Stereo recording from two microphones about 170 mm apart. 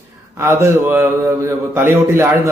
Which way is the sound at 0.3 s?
15° right (ahead or behind).